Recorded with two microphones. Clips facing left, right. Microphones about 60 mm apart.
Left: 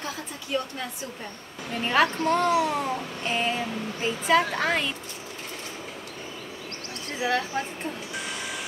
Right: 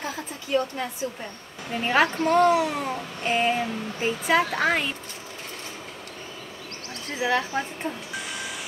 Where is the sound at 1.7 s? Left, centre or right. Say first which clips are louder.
Right 1 dB; centre.